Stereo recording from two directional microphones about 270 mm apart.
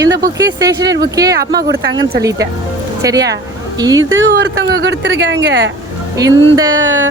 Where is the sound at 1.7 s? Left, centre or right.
Right.